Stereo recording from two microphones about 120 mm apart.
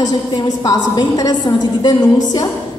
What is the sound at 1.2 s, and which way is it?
Speech, 35° left (ahead or behind).